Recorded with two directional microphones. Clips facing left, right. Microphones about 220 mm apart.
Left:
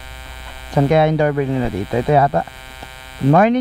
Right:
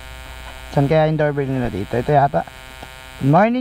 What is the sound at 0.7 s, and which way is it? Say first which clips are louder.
Speech: left 1 dB; 15° left (ahead or behind).